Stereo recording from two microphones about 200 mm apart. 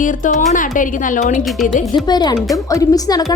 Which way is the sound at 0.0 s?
40° left (ahead or behind).